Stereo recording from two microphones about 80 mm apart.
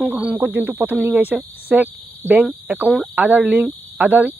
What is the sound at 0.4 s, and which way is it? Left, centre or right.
Speech, right.